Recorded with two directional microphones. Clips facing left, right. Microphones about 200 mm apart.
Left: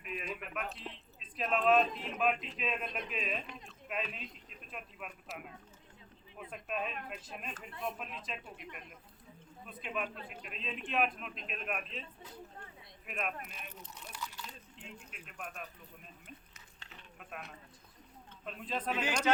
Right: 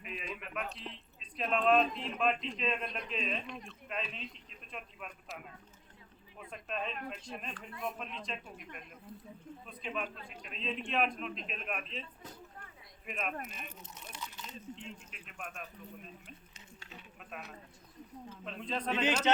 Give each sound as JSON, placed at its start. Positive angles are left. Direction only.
{"t": 0.0, "sound": "a man's voice", "side_deg": 0}
{"t": 6.5, "sound": "a man's voice", "side_deg": 5}
{"t": 13.1, "sound": "a man's voice", "side_deg": 0}
{"t": 14.1, "sound": "crunch", "side_deg": -20}
{"t": 14.8, "sound": "a man's voice", "side_deg": 5}
{"t": 17.2, "sound": "a man's voice", "side_deg": 0}